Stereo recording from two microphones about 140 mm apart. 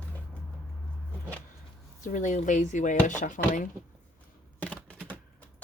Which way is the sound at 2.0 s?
65° left (ahead or behind).